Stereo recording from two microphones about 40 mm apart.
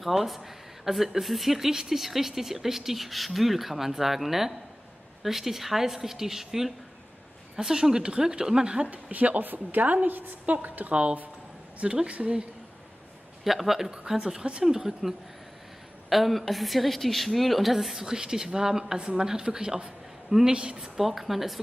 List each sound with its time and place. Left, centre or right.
0.0 s a woman's voice: centre
8.9 s a woman's voice: right
10.9 s a woman's voice: right
13.4 s a woman's voice: centre; by 20.9 s right
20.9 s speech: centre